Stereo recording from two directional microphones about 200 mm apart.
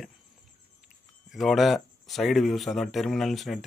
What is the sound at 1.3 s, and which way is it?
Speech, centre (ahead or behind).